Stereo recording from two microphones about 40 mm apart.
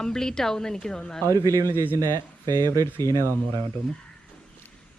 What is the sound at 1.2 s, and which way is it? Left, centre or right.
Speech, left.